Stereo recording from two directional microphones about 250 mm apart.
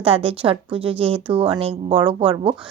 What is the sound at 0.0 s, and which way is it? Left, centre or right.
Speech, right.